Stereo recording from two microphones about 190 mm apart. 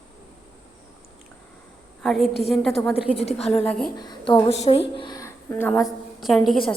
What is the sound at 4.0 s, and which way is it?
A woman's voice, 25° left (ahead or behind).